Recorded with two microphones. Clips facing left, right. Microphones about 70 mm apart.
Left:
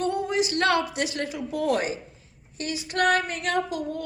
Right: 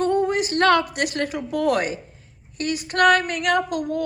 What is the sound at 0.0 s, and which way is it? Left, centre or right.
A woman's voice, right.